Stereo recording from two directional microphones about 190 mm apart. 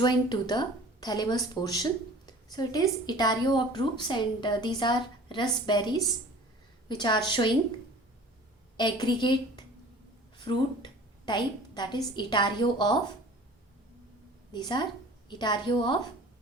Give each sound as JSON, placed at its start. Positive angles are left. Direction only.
{"t": 0.0, "sound": "speech", "side_deg": 25}
{"t": 8.8, "sound": "speech", "side_deg": 25}
{"t": 10.3, "sound": "a sound", "side_deg": 25}
{"t": 12.1, "sound": "speech", "side_deg": 25}
{"t": 14.5, "sound": "speech", "side_deg": 25}